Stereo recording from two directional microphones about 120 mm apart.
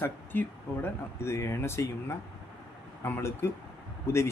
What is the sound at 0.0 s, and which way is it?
Speech, 20° left (ahead or behind).